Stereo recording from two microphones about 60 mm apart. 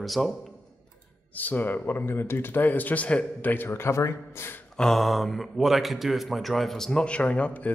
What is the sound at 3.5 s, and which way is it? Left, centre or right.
Speech, left.